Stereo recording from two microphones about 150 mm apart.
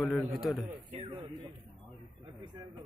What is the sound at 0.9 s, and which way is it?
Speech, 45° right (ahead or behind).